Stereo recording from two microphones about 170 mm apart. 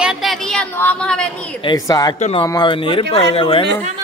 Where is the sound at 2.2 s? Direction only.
35° left (ahead or behind).